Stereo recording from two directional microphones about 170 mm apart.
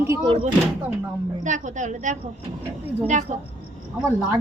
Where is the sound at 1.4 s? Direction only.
45° right (ahead or behind).